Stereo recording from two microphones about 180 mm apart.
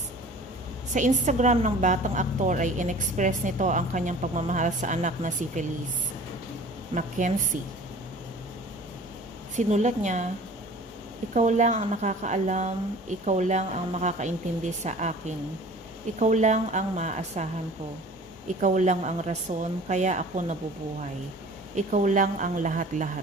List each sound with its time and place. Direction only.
0.9 s a woman's voice: 45° right (ahead or behind)
6.9 s a woman's voice: 45° right (ahead or behind)
9.6 s speech: 40° right (ahead or behind)
11.3 s a woman's voice: 40° right (ahead or behind)
16.1 s speech: 40° right (ahead or behind)
21.8 s a woman's voice: 40° right (ahead or behind)